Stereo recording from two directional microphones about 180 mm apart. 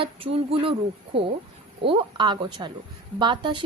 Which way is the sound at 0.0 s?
30° right (ahead or behind).